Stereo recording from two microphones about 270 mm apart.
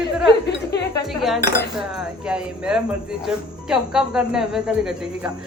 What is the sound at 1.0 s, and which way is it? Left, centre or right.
Cutlery, centre.